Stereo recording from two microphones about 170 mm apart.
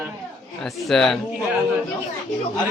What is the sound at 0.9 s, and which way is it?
Speech, centre (ahead or behind).